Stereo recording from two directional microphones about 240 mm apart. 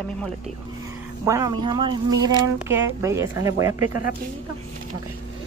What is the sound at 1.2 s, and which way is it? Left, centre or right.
Speech, centre.